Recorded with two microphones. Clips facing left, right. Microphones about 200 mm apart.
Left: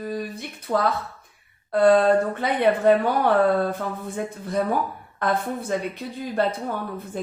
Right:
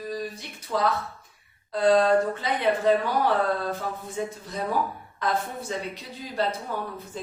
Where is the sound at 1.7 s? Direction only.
60° left (ahead or behind).